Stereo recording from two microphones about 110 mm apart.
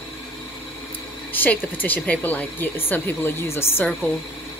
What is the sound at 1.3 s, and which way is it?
Speech, 15° left (ahead or behind).